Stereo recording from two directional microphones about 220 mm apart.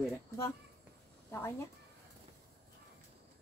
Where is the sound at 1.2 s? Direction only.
10° left (ahead or behind).